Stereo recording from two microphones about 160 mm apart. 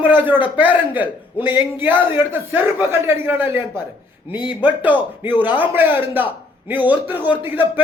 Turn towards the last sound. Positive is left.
turn(degrees=-10)  # may be behind; listen again after turning